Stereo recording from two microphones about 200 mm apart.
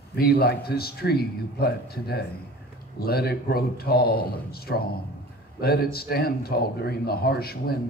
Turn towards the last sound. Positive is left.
turn(degrees=50)  # may be behind; listen again after turning